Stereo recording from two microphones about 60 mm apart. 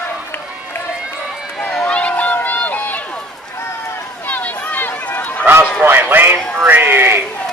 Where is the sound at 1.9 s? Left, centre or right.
Left.